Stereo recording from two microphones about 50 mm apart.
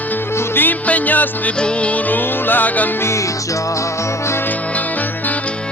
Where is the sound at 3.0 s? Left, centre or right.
Left.